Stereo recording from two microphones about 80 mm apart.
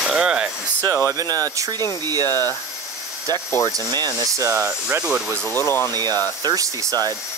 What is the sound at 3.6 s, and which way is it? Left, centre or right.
Speech, right.